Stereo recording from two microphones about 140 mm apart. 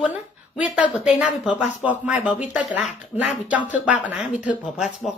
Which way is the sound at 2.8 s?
50° left (ahead or behind).